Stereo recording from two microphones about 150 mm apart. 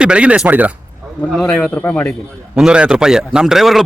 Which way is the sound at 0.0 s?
5° right (ahead or behind).